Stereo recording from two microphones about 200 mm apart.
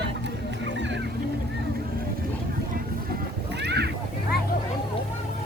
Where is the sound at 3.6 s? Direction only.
55° right (ahead or behind).